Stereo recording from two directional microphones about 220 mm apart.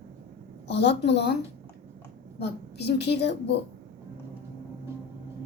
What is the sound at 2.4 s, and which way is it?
A woman's voice, 50° left (ahead or behind).